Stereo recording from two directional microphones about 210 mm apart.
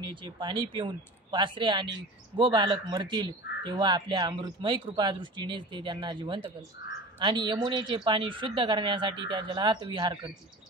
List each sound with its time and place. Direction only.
0.0 s speech: 20° right (ahead or behind)